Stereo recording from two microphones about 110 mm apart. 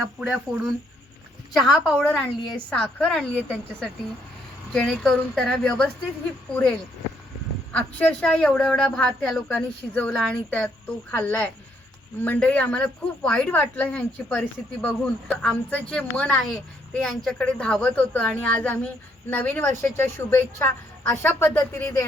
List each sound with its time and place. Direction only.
0.0 s speech: 10° right (ahead or behind)
1.5 s a woman's voice: centre (ahead or behind)
7.7 s a woman's voice: 15° left (ahead or behind)